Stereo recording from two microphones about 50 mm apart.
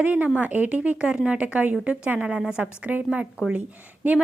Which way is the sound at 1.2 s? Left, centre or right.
Right.